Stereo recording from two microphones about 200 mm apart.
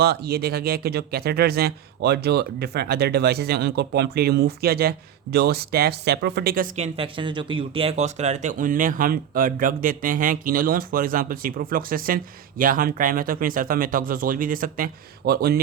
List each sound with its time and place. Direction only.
0.0 s speech: 50° right (ahead or behind)